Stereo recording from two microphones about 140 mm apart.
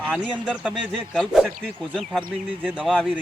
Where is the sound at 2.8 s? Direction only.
5° left (ahead or behind).